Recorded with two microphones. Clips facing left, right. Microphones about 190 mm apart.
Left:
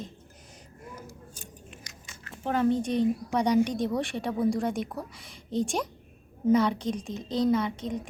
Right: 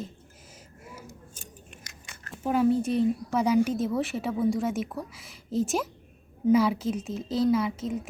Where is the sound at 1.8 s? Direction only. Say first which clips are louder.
Even; 55° right (ahead or behind).